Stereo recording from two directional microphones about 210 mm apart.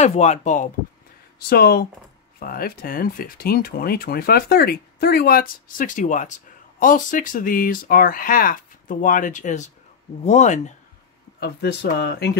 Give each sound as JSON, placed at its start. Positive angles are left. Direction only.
{"t": 0.0, "sound": "speech", "side_deg": 35}
{"t": 1.5, "sound": "speech", "side_deg": 50}
{"t": 11.3, "sound": "speech", "side_deg": 50}